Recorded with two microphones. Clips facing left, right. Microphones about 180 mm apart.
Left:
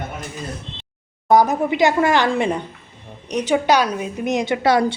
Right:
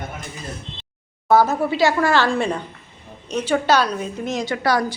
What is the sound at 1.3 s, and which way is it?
A woman's voice, 15° left (ahead or behind).